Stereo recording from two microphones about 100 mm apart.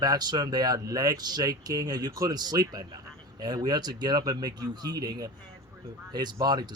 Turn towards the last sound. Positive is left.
turn(degrees=-45)  # may be behind; listen again after turning